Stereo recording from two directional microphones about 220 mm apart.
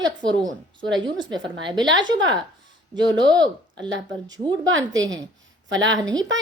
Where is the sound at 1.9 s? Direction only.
55° right (ahead or behind).